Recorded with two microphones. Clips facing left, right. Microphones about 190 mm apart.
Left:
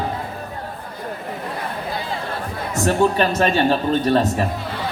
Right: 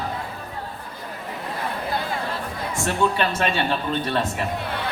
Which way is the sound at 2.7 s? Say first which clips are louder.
Left 5 dB; 40° left (ahead or behind).